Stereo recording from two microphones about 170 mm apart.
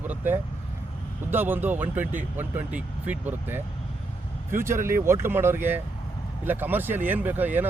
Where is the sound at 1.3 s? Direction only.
10° right (ahead or behind).